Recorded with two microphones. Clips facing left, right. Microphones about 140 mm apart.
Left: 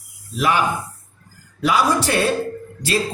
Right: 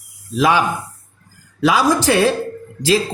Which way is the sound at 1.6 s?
90° right.